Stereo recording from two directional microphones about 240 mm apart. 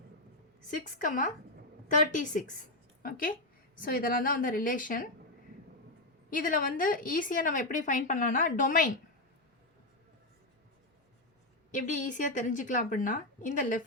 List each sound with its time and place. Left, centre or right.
1.0 s a woman's voice: left
6.3 s a woman's voice: left
11.7 s a woman's voice: left